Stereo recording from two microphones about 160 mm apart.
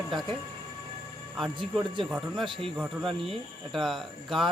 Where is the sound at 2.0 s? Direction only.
5° right (ahead or behind).